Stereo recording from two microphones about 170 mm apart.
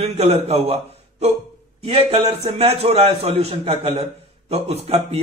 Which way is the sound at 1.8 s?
35° right (ahead or behind).